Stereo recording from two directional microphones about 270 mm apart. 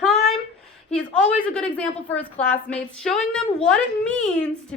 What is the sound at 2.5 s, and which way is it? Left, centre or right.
A woman's voice, centre.